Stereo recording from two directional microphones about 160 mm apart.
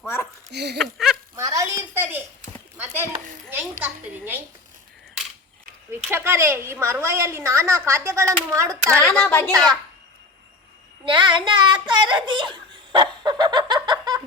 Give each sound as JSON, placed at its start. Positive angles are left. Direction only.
{"t": 0.5, "sound": "speech", "side_deg": -90}
{"t": 0.8, "sound": "speech", "side_deg": 0}
{"t": 1.4, "sound": "a sound", "side_deg": -20}
{"t": 6.1, "sound": "a woman's voice", "side_deg": -15}
{"t": 8.9, "sound": "a woman's voice", "side_deg": 10}
{"t": 11.0, "sound": "a sound", "side_deg": -30}